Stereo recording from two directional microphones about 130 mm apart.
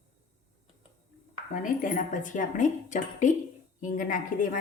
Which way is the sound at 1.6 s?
90° left.